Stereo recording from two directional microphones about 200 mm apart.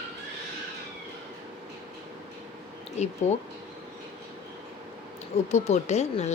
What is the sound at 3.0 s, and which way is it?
Speech, 35° left (ahead or behind).